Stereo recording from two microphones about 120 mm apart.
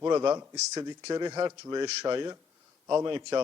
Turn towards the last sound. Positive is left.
turn(degrees=-30)  # may be behind; listen again after turning